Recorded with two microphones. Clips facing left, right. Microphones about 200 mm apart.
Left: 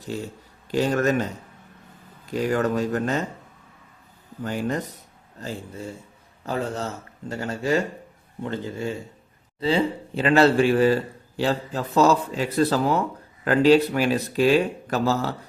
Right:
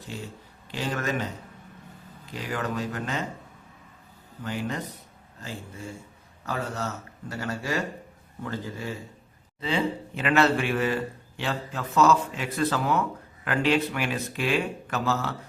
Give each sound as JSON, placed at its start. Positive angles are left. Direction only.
{"t": 0.7, "sound": "speech", "side_deg": 45}
{"t": 2.3, "sound": "speech", "side_deg": 45}
{"t": 4.4, "sound": "a man's voice", "side_deg": 45}